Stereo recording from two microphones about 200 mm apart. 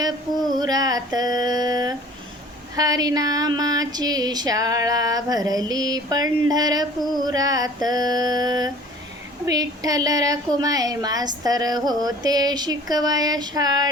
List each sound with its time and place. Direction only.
0.5 s female singing: 20° right (ahead or behind)
2.7 s speech: 20° right (ahead or behind)